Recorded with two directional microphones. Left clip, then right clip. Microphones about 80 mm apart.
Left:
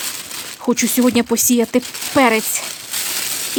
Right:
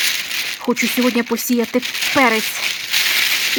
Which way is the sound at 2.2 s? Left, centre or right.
Left.